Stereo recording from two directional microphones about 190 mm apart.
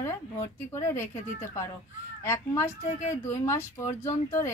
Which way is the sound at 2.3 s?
15° left (ahead or behind).